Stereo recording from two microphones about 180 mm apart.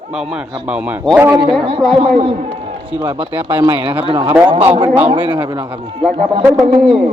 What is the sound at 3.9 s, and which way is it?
Speech, 30° right (ahead or behind).